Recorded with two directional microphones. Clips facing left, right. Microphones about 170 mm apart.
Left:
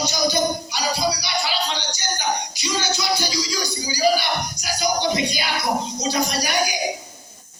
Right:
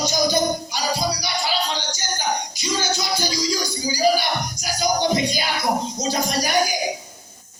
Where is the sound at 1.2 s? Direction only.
45° right (ahead or behind).